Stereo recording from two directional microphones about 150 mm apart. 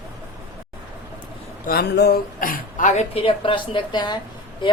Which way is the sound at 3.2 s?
35° left (ahead or behind).